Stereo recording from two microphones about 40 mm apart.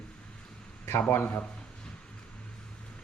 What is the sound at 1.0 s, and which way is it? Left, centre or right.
Speech, left.